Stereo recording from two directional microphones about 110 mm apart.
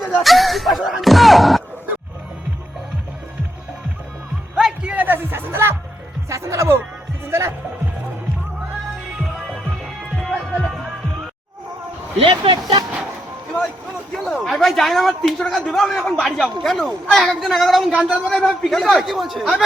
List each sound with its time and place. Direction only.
0.1 s speech: centre (ahead or behind)
4.5 s music: 10° right (ahead or behind)
6.2 s speech: 25° right (ahead or behind)
7.3 s music: 25° right (ahead or behind)
10.2 s music: centre (ahead or behind)
12.3 s speech: 40° right (ahead or behind)
14.3 s speech: centre (ahead or behind)